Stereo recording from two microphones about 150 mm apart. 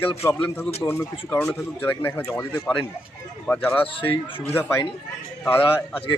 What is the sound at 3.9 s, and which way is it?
Speech, 35° left (ahead or behind).